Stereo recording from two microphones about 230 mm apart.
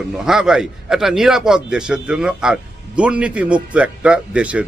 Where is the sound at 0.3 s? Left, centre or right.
Centre.